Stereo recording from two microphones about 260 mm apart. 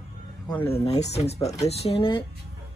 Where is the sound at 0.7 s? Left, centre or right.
Left.